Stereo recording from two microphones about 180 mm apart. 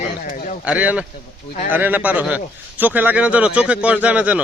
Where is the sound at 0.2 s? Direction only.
45° left (ahead or behind).